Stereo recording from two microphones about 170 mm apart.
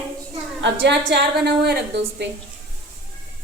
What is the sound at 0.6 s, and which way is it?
A woman's voice, 90° right.